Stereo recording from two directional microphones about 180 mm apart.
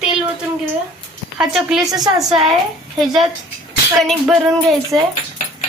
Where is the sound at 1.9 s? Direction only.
20° right (ahead or behind).